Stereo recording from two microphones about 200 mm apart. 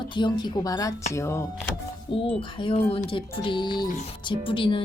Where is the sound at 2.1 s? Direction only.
25° left (ahead or behind).